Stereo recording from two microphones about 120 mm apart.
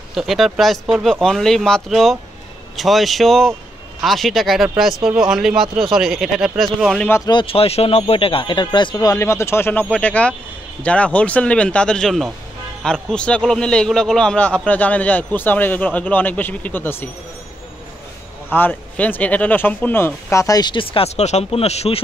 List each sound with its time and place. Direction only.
0.1 s speech: centre (ahead or behind)
7.2 s a man's voice: 45° left (ahead or behind); by 17.1 s 15° left (ahead or behind)
18.5 s speech: 15° left (ahead or behind); by 22.0 s 60° left (ahead or behind)